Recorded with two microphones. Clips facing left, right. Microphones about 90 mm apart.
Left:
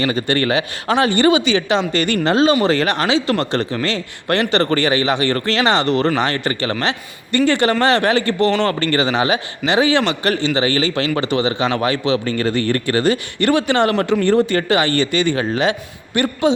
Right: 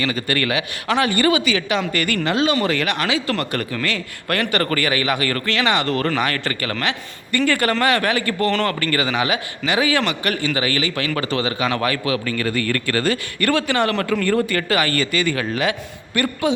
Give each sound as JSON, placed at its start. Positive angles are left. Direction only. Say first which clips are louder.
{"t": 0.0, "sound": "a man's voice", "louder": "left 4 dB", "side_deg": 25}